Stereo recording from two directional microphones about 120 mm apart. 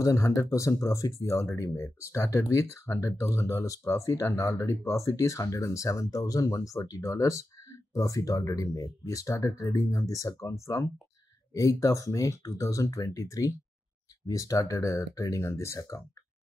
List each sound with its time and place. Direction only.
0.0 s speech: 25° left (ahead or behind)